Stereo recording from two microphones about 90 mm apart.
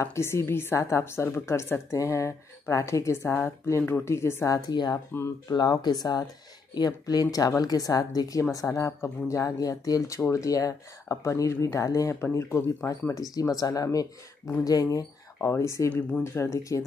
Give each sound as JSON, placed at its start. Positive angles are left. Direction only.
{"t": 0.0, "sound": "speech", "side_deg": 30}
{"t": 4.5, "sound": "speech", "side_deg": 45}
{"t": 12.2, "sound": "speech", "side_deg": 25}
{"t": 13.1, "sound": "speech", "side_deg": 40}
{"t": 15.4, "sound": "speech", "side_deg": 30}